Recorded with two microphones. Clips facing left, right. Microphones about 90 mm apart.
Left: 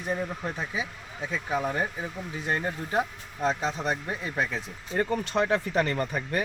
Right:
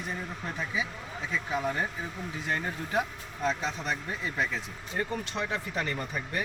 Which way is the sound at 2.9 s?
30° left (ahead or behind).